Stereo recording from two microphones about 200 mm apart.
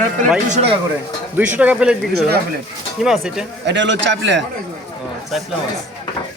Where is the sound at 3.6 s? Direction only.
60° right (ahead or behind).